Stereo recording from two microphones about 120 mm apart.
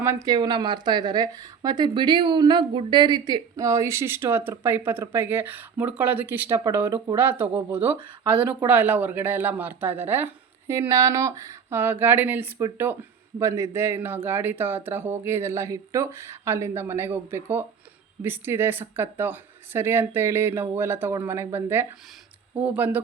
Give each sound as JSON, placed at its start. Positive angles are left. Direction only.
{"t": 0.0, "sound": "speech", "side_deg": -25}
{"t": 0.3, "sound": "speech", "side_deg": -40}